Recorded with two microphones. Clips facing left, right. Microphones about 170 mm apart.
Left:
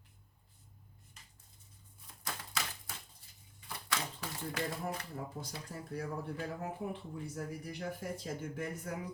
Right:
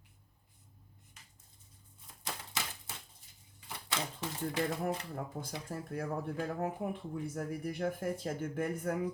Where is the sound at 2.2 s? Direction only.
25° right (ahead or behind).